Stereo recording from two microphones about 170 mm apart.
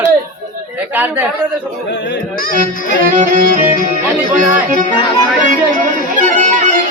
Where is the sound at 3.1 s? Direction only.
50° right (ahead or behind).